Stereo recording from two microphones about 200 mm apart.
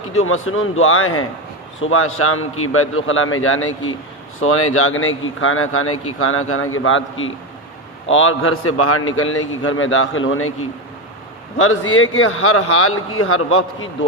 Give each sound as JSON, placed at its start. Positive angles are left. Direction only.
{"t": 0.3, "sound": "a man's voice", "side_deg": 90}
{"t": 11.5, "sound": "a man's voice", "side_deg": 90}